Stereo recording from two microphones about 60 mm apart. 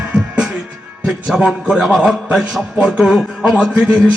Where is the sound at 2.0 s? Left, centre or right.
Centre.